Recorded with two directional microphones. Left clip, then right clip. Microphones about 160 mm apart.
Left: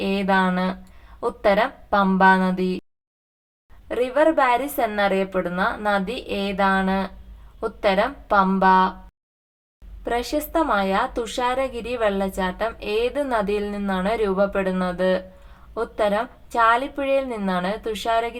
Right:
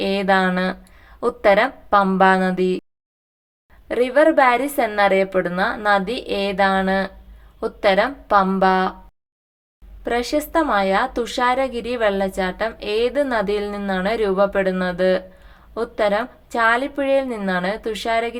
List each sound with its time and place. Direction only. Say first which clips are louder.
0.0 s a woman's voice: right 3 dB; 25° right (ahead or behind)
3.8 s a woman's voice: right 3 dB; 20° right (ahead or behind)
10.0 s a woman's voice: right 3 dB; 15° right (ahead or behind)